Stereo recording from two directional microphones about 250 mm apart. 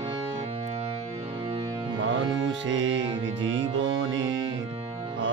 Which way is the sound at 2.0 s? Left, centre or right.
Right.